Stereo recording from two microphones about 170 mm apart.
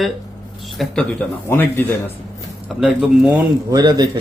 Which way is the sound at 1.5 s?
15° left (ahead or behind).